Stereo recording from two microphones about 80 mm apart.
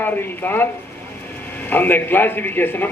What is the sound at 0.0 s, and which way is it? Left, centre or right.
Speech, left.